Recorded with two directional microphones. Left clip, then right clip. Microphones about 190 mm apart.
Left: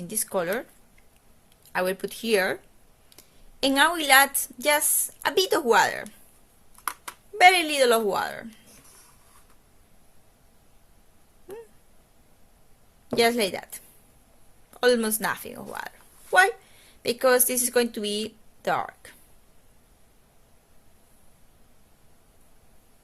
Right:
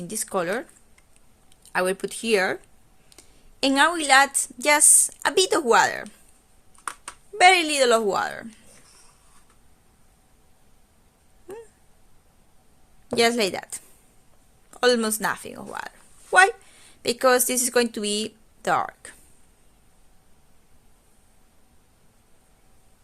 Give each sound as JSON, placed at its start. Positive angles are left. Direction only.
{"t": 0.0, "sound": "a woman's voice", "side_deg": -20}
{"t": 7.3, "sound": "a woman's voice", "side_deg": -20}
{"t": 11.5, "sound": "a sound", "side_deg": -15}
{"t": 13.1, "sound": "a woman's voice", "side_deg": -20}